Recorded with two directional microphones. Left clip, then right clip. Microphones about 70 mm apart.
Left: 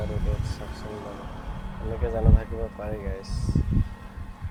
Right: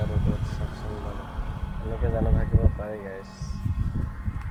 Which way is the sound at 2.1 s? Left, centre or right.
Left.